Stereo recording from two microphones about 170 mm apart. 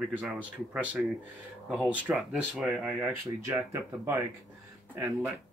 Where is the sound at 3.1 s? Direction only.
15° right (ahead or behind).